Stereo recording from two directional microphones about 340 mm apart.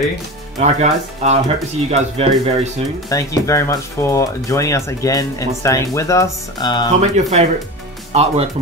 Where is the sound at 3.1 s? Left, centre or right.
Centre.